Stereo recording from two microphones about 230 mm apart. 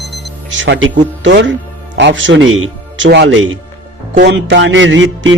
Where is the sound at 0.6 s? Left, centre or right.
Right.